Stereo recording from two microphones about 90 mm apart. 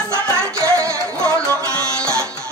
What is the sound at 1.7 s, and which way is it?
Music, 10° left (ahead or behind).